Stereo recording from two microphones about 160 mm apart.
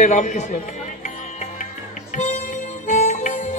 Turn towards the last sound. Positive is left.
turn(degrees=50)  # may be behind; listen again after turning